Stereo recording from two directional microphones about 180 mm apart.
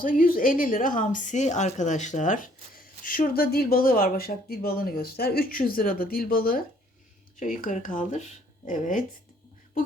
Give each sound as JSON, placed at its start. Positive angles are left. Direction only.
{"t": 0.0, "sound": "a woman's voice", "side_deg": 50}